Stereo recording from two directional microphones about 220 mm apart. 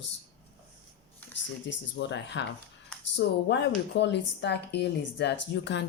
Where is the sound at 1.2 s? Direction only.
10° left (ahead or behind).